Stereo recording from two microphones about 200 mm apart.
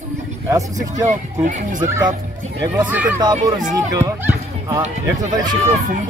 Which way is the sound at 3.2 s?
20° right (ahead or behind).